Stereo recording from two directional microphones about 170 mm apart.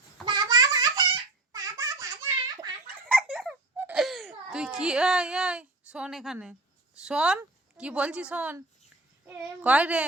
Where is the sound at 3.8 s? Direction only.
5° right (ahead or behind).